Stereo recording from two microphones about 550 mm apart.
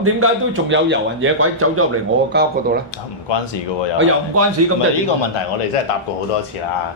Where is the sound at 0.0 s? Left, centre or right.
Right.